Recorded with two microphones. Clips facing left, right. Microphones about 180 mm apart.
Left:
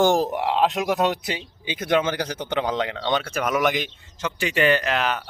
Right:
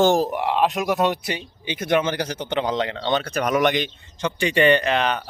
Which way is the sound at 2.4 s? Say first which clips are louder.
Right 2 dB; 10° left (ahead or behind).